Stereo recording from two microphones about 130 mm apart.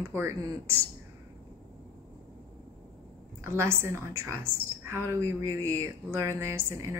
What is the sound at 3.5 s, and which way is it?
Speech, 20° right (ahead or behind).